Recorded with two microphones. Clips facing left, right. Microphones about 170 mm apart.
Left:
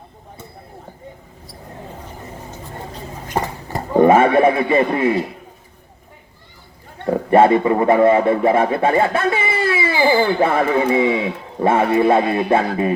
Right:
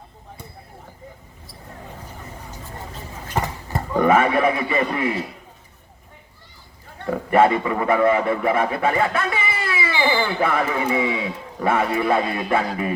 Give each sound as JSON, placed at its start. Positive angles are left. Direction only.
{"t": 3.8, "sound": "speech", "side_deg": 30}
{"t": 7.0, "sound": "a man's voice", "side_deg": 30}